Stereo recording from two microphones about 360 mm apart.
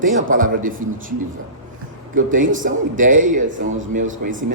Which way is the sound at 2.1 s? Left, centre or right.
Right.